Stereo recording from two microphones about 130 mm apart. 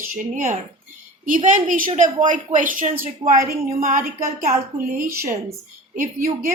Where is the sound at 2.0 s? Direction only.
75° right (ahead or behind); by 5.0 s 90° right.